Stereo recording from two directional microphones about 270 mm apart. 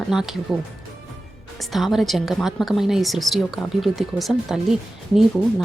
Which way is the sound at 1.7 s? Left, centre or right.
Centre.